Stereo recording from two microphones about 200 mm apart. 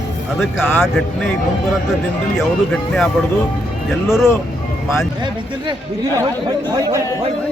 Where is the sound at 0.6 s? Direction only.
10° left (ahead or behind).